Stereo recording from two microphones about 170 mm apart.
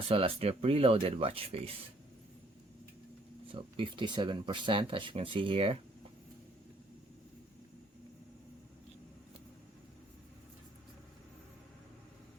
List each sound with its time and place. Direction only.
0.1 s speech: 35° right (ahead or behind)
3.5 s speech: 30° right (ahead or behind)